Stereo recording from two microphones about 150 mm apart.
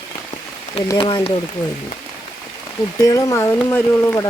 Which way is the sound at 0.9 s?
35° left (ahead or behind).